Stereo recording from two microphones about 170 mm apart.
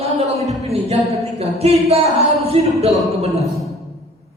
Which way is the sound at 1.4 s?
35° right (ahead or behind).